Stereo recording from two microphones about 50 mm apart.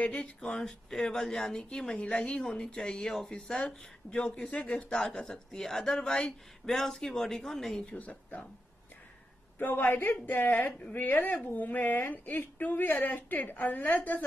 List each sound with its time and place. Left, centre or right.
0.0 s speech: left
4.8 s speech: centre
7.8 s speech: left
9.6 s a woman's voice: left